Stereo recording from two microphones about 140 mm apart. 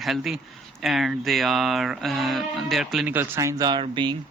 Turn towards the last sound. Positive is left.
turn(degrees=-35)  # may be behind; listen again after turning